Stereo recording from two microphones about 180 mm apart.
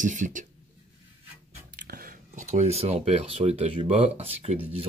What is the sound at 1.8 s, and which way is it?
Speech, 55° right (ahead or behind).